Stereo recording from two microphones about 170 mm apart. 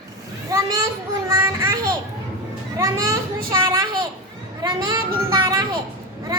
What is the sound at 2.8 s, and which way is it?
Speech, 15° right (ahead or behind).